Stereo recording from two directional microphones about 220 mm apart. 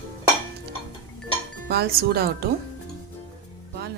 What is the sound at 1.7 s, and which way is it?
Speech, 45° right (ahead or behind).